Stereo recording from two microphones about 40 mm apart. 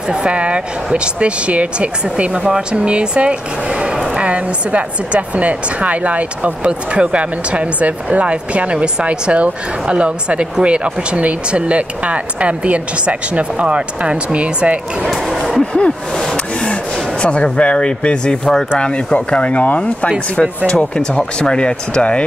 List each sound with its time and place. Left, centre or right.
0.1 s a woman's voice: right
15.0 s speech: centre
15.6 s a sound: left
17.2 s speech: left
18.8 s speech: left